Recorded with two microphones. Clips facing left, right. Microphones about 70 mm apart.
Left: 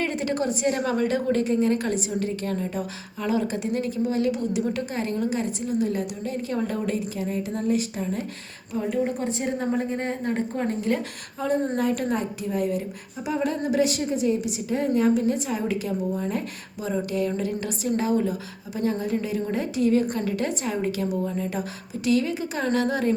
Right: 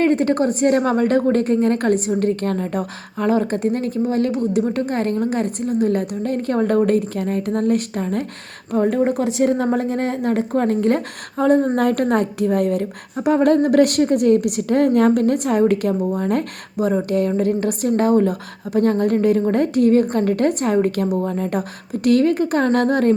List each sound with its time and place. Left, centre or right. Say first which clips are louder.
0.0 s a woman's voice: right 9 dB; right